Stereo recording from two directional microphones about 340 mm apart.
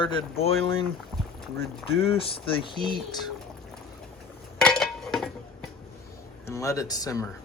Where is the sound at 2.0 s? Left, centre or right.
Centre.